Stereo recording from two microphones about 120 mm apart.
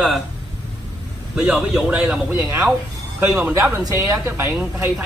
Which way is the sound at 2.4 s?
25° right (ahead or behind).